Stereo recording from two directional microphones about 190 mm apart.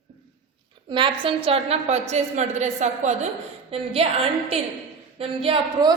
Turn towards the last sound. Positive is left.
turn(degrees=-30)  # may be behind; listen again after turning